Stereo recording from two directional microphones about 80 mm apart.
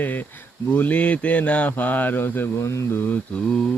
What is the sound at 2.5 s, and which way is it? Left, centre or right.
Speech, left.